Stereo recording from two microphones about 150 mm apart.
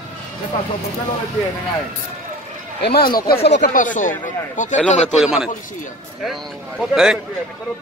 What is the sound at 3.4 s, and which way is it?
A man's voice, 65° left (ahead or behind).